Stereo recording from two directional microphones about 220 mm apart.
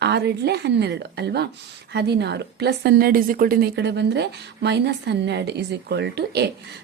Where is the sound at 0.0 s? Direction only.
50° right (ahead or behind).